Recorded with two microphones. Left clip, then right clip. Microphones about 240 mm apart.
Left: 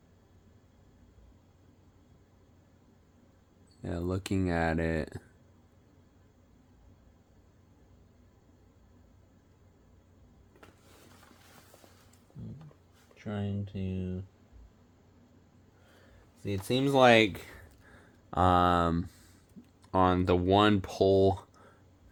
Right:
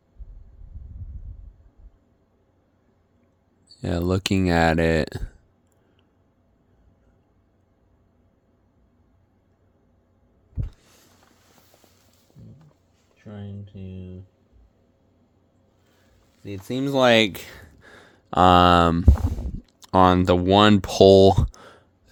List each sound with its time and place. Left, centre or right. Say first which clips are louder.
3.8 s speech: right 10 dB; right
13.2 s speech: left 3 dB; centre
16.4 s speech: right 2 dB; right
19.8 s speech: right 10 dB; right